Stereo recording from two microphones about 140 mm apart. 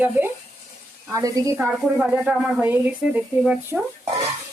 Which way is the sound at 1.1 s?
25° right (ahead or behind).